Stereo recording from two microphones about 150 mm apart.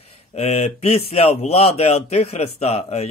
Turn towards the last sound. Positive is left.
turn(degrees=45)  # may be behind; listen again after turning